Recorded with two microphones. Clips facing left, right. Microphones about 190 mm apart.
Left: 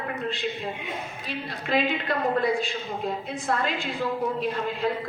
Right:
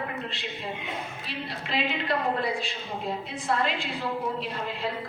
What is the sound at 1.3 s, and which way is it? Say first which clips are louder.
Speech: left 6 dB; 45° left (ahead or behind).